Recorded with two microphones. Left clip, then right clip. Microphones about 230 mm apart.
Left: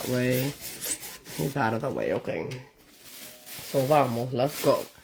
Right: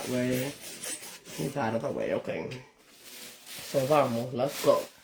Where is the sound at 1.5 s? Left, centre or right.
Left.